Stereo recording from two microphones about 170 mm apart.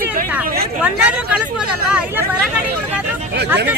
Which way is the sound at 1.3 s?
5° right (ahead or behind).